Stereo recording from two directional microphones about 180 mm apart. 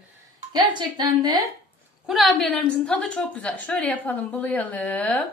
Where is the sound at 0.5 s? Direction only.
25° right (ahead or behind).